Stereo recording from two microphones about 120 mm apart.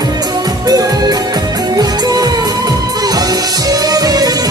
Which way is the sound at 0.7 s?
30° right (ahead or behind).